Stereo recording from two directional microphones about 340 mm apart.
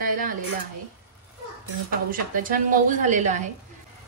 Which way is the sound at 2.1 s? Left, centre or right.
Right.